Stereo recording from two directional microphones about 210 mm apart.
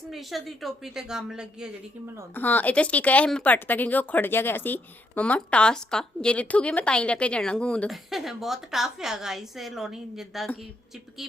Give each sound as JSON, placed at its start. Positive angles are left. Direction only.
{"t": 0.1, "sound": "speech", "side_deg": 0}
{"t": 2.3, "sound": "speech", "side_deg": 10}